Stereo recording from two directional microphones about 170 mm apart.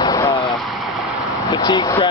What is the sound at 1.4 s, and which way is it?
Speech, 25° left (ahead or behind).